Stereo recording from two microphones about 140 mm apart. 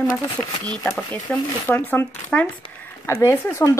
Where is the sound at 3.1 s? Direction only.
20° left (ahead or behind).